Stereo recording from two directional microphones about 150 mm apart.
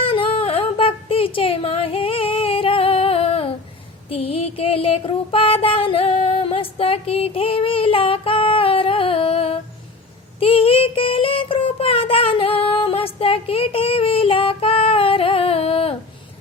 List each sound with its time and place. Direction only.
0.0 s a sound: 35° left (ahead or behind)
4.1 s music: 40° left (ahead or behind)
10.4 s child singing: 35° left (ahead or behind)